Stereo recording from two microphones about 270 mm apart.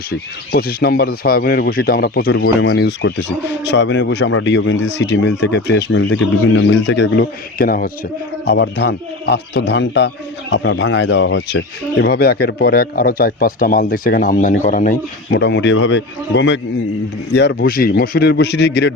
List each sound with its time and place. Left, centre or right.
0.1 s speech: left